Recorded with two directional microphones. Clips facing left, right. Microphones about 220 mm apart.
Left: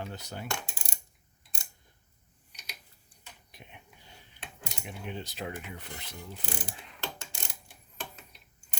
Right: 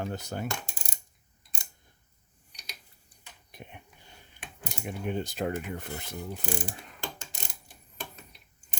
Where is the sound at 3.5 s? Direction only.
50° right (ahead or behind).